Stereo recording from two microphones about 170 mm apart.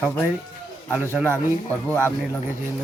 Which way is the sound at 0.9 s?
10° right (ahead or behind).